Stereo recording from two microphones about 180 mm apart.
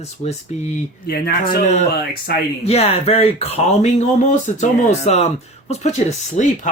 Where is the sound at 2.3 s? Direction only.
65° left (ahead or behind).